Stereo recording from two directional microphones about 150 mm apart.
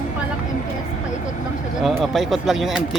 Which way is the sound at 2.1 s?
Centre (ahead or behind).